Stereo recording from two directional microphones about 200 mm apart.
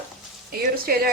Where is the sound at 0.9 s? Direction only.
50° right (ahead or behind).